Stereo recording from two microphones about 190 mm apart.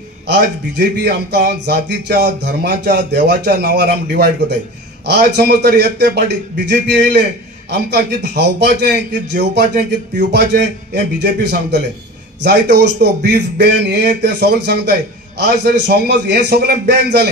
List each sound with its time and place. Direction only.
0.3 s a man's voice: 60° right (ahead or behind)
12.4 s a man's voice: 65° right (ahead or behind)